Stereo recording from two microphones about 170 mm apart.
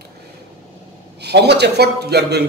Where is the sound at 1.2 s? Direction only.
75° right (ahead or behind).